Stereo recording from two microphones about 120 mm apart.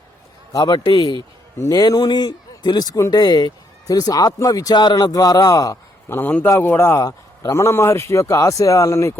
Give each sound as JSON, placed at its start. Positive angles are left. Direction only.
{"t": 0.5, "sound": "a man's voice", "side_deg": 35}
{"t": 6.1, "sound": "a man's voice", "side_deg": 15}